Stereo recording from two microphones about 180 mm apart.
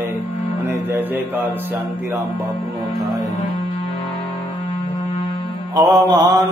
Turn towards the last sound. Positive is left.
turn(degrees=-20)  # may be behind; listen again after turning